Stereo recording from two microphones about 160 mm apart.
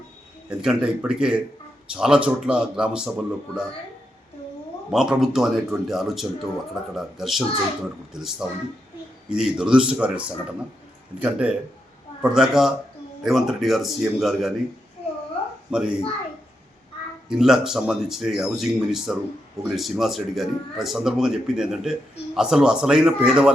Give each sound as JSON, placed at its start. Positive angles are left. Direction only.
{"t": 0.6, "sound": "speech", "side_deg": -5}
{"t": 4.9, "sound": "speech", "side_deg": -5}
{"t": 15.7, "sound": "speech", "side_deg": -5}
{"t": 17.2, "sound": "speech", "side_deg": -5}